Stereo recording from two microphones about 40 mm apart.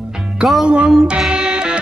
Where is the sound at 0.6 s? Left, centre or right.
Right.